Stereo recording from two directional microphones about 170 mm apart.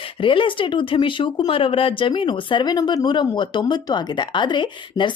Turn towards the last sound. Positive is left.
turn(degrees=25)  # may be behind; listen again after turning